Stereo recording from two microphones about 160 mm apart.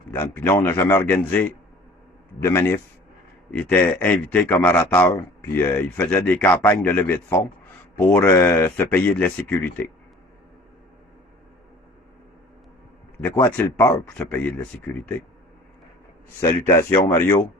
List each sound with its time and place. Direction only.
0.3 s speech: 15° left (ahead or behind)
13.2 s speech: 15° left (ahead or behind)
16.6 s speech: 15° left (ahead or behind)